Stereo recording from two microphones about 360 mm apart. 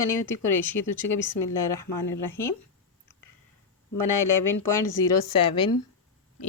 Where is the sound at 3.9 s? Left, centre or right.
Left.